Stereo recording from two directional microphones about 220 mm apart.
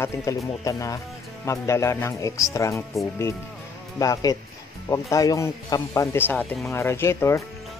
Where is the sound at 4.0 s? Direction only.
15° left (ahead or behind).